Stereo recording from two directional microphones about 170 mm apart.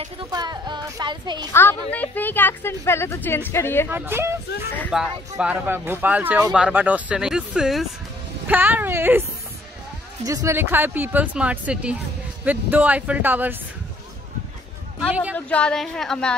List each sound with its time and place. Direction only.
0.2 s speech: 25° right (ahead or behind)
1.5 s a woman's voice: 15° left (ahead or behind)
3.9 s speech: 15° right (ahead or behind)
10.2 s speech: 20° right (ahead or behind)
15.3 s speech: 5° left (ahead or behind)